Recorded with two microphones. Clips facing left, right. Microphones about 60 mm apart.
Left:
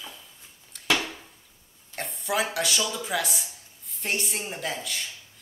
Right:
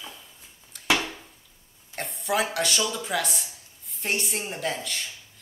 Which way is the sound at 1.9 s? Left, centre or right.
Centre.